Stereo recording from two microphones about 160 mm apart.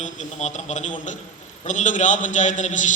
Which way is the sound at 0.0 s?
50° left (ahead or behind).